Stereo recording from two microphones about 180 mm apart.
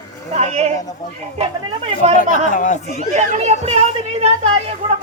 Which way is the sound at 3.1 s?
40° right (ahead or behind).